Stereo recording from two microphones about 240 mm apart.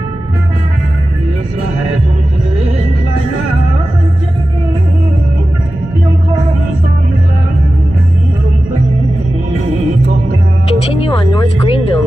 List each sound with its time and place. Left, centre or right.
10.9 s speech: left